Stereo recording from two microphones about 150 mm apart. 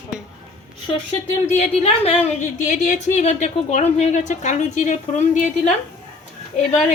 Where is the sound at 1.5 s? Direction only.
45° left (ahead or behind).